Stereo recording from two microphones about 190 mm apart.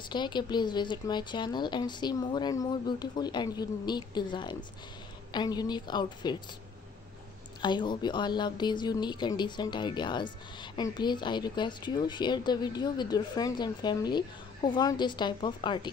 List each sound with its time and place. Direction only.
0.1 s speech: 25° left (ahead or behind)
7.6 s speech: 25° left (ahead or behind)